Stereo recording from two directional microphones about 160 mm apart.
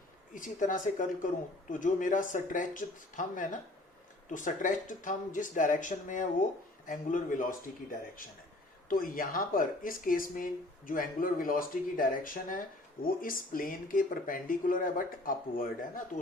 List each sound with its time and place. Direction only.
0.3 s speech: 55° left (ahead or behind)